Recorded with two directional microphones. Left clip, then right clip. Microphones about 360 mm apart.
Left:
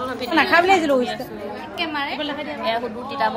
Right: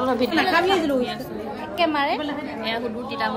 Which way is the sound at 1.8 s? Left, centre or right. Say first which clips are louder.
Right 4 dB; right.